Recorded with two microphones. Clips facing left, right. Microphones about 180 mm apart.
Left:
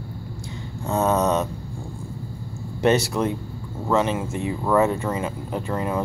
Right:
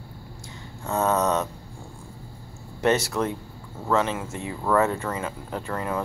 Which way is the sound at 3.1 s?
15° left (ahead or behind).